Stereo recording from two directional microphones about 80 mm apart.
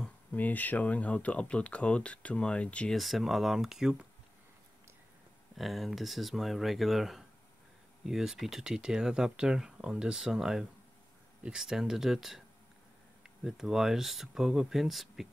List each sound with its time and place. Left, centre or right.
0.3 s speech: left
2.9 s speech: centre
5.6 s speech: centre